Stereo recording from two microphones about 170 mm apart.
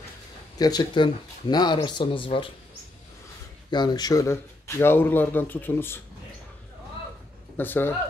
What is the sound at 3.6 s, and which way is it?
Speech, 25° left (ahead or behind).